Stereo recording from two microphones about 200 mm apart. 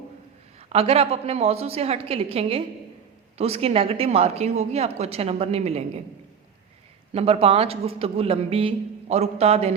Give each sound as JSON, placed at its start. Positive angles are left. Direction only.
{"t": 0.7, "sound": "a man's voice", "side_deg": -30}
{"t": 7.1, "sound": "a man's voice", "side_deg": -30}